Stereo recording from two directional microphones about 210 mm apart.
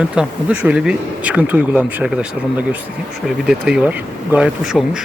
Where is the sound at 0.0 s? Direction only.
5° right (ahead or behind).